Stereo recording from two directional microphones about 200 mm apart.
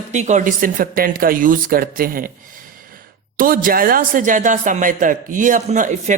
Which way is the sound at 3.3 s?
45° right (ahead or behind).